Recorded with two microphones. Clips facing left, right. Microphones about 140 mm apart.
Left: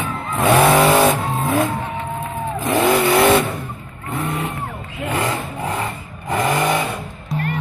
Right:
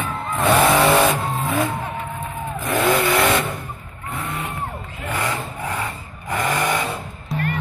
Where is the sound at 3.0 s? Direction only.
25° left (ahead or behind).